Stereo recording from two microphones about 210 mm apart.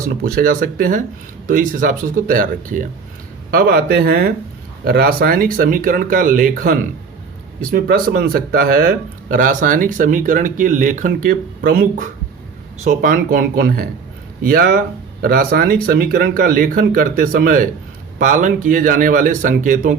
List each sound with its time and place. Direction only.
0.0 s speech: 40° right (ahead or behind)